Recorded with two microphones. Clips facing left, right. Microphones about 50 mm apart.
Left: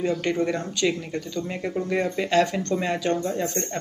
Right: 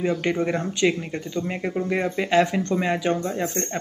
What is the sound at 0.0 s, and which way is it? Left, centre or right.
Speech, centre.